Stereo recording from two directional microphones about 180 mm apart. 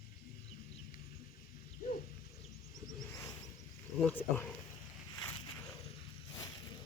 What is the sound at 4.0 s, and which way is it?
Wild animals, 10° left (ahead or behind).